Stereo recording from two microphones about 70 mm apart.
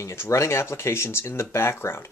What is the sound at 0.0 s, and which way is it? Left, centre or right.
Speech, left.